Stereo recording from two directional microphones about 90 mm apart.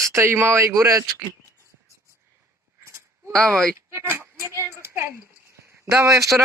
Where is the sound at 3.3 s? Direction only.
10° left (ahead or behind).